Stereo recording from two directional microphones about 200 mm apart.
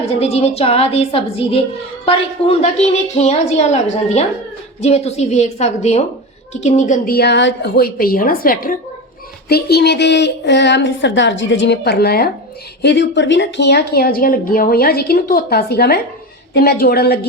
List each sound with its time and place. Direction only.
0.2 s a woman's voice: 30° left (ahead or behind); by 12.3 s 50° left (ahead or behind)
12.8 s speech: 60° left (ahead or behind)